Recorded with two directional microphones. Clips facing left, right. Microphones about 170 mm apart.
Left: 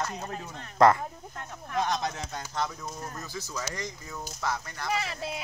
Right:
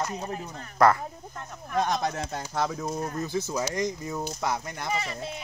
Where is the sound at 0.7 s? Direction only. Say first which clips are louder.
Left 1 dB; 20° left (ahead or behind).